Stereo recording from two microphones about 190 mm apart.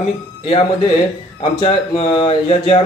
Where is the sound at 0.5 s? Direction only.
25° left (ahead or behind).